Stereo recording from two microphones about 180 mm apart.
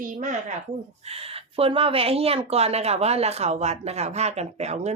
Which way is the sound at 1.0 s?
35° right (ahead or behind).